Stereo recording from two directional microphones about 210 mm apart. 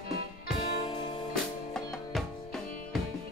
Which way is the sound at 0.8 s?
25° left (ahead or behind).